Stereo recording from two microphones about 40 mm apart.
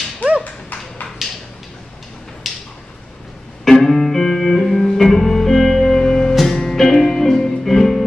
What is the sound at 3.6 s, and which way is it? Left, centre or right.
Music, centre.